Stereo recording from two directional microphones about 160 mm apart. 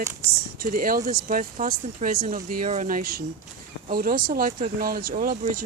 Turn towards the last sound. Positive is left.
turn(degrees=-60)  # may be behind; listen again after turning